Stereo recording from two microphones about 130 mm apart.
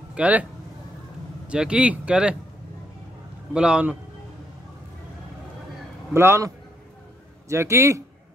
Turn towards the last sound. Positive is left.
turn(degrees=-20)  # may be behind; listen again after turning